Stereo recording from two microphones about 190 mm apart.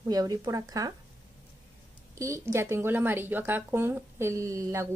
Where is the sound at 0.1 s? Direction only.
20° right (ahead or behind).